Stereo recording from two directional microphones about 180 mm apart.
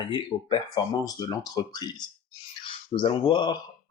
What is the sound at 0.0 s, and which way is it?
Speech, 25° left (ahead or behind).